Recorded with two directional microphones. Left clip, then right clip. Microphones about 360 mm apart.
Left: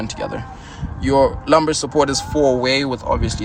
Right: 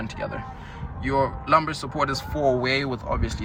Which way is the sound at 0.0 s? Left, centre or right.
Centre.